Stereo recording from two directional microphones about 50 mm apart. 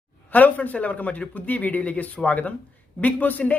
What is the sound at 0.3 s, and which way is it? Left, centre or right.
A woman's voice, left.